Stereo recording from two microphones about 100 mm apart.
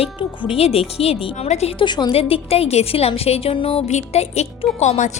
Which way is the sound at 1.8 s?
50° left (ahead or behind).